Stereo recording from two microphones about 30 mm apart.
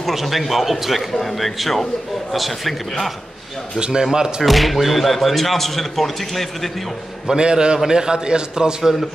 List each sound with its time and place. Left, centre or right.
0.0 s speech: centre
1.1 s a man's voice: centre
3.8 s a man's voice: right
4.4 s speech: centre
7.3 s a man's voice: right